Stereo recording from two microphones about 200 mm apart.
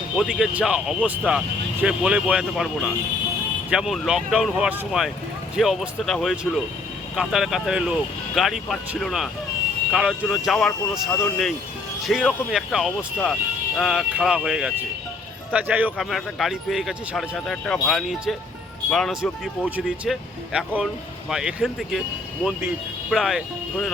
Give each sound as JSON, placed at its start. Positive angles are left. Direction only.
{"t": 0.2, "sound": "speech", "side_deg": 0}